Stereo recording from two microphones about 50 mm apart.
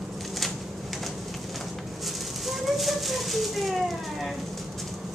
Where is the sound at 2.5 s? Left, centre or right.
Centre.